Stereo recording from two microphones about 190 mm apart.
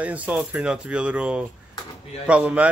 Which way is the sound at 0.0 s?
10° right (ahead or behind).